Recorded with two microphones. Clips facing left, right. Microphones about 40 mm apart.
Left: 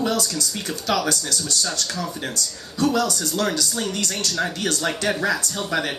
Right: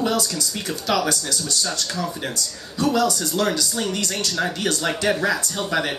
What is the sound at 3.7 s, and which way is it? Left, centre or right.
A man's voice, centre.